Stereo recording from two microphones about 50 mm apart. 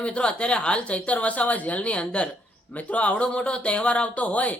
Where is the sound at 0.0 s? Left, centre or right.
Left.